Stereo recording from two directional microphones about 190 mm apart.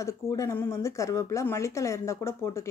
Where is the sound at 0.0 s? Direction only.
15° left (ahead or behind).